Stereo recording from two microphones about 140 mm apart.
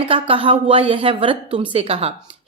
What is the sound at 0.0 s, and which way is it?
A woman's voice, 40° right (ahead or behind).